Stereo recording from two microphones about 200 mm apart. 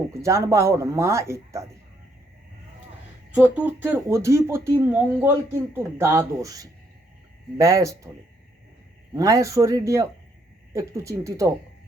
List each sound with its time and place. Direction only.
0.1 s speech: 15° right (ahead or behind)
3.3 s speech: 5° right (ahead or behind)
9.1 s speech: 15° right (ahead or behind)